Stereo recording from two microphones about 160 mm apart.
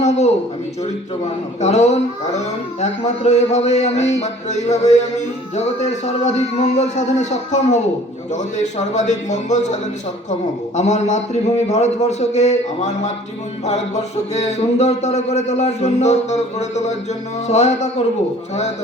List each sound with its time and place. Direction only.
0.0 s a man's voice: 45° left (ahead or behind)
10.8 s speech: 45° left (ahead or behind)